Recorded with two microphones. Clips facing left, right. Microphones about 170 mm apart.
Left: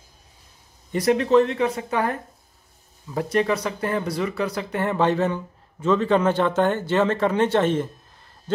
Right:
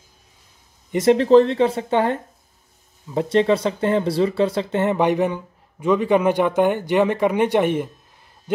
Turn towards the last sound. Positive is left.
turn(degrees=-15)  # may be behind; listen again after turning